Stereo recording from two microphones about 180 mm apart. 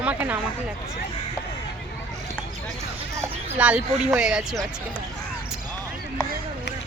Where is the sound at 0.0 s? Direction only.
10° right (ahead or behind).